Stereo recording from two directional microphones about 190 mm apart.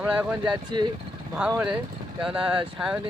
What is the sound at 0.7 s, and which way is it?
Speech, 25° right (ahead or behind).